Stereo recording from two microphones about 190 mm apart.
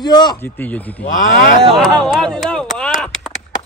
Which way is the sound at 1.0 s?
40° left (ahead or behind).